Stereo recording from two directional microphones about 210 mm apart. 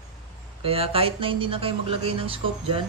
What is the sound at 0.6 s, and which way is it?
Speech, 25° right (ahead or behind).